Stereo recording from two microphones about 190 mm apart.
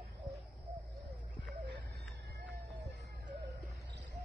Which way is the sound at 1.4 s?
65° right (ahead or behind).